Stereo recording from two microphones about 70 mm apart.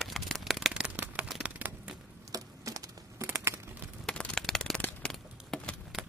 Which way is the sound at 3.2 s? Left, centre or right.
Right.